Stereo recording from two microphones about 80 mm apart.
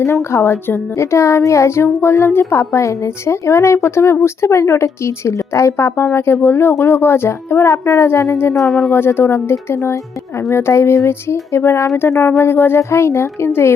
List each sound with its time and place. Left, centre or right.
0.0 s a woman's voice: left
8.5 s speech: centre
8.9 s a woman's voice: left